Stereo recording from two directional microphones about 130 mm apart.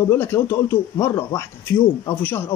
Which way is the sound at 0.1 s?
20° left (ahead or behind).